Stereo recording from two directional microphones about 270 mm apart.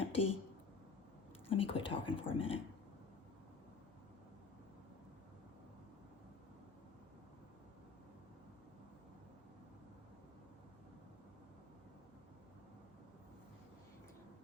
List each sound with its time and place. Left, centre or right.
0.1 s speech: left
1.5 s speech: left